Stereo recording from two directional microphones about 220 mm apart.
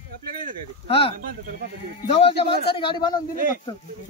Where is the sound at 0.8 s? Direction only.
25° left (ahead or behind).